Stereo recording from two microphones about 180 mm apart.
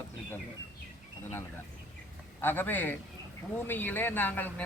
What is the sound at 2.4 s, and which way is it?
Speech, 10° left (ahead or behind).